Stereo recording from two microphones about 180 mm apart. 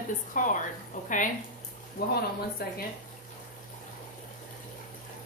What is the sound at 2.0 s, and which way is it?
Speech, 60° left (ahead or behind).